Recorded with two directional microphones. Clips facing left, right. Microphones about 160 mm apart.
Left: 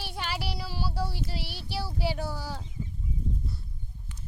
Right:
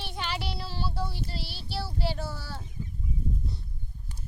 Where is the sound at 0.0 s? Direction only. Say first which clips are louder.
Even; 5° left (ahead or behind).